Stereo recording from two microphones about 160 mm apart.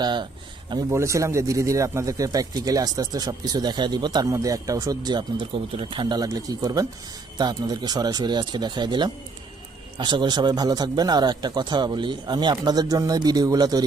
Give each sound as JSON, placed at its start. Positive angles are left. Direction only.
{"t": 0.0, "sound": "speech", "side_deg": -30}